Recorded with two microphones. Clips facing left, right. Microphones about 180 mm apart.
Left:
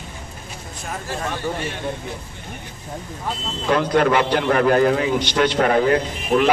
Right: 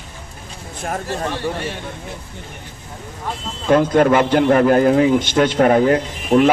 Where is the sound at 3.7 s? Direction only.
45° right (ahead or behind).